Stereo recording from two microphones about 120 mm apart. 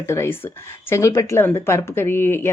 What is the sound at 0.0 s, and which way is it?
Speech, 20° left (ahead or behind).